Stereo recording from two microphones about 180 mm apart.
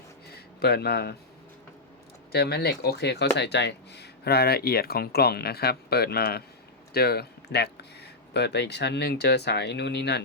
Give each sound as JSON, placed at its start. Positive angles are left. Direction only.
{"t": 0.3, "sound": "speech", "side_deg": 60}
{"t": 2.3, "sound": "speech", "side_deg": 60}